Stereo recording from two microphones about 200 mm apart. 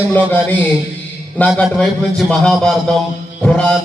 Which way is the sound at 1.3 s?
5° left (ahead or behind).